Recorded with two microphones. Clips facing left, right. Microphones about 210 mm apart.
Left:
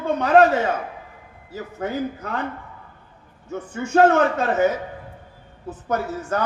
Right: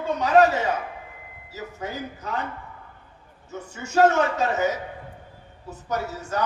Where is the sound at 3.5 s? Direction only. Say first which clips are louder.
Left 6 dB; 55° left (ahead or behind).